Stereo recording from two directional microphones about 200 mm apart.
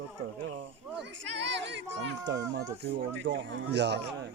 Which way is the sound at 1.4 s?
60° right (ahead or behind).